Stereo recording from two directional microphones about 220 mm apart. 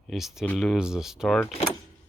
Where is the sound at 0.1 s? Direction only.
Centre (ahead or behind).